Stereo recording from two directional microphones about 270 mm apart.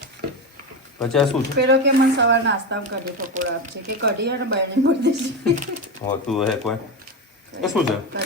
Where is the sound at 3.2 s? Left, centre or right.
Right.